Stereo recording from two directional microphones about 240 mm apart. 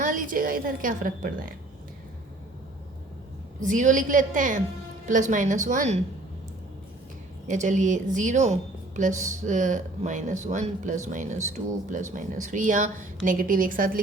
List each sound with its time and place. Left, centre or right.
0.0 s a woman's voice: right
3.6 s speech: right
7.4 s speech: right